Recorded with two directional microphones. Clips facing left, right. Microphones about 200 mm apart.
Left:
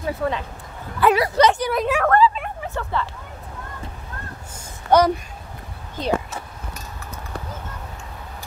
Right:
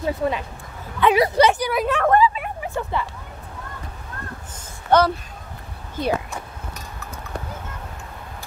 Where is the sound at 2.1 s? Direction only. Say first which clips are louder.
Right 1 dB; 15° right (ahead or behind).